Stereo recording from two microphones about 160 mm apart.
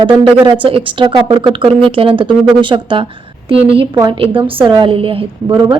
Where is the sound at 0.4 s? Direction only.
30° right (ahead or behind).